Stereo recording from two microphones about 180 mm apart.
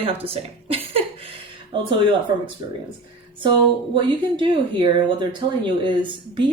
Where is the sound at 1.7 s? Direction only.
30° right (ahead or behind).